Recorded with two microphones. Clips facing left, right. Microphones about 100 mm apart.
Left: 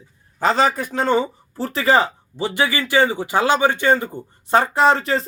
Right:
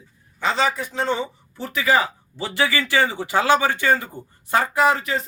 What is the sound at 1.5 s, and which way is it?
Speech, 35° left (ahead or behind).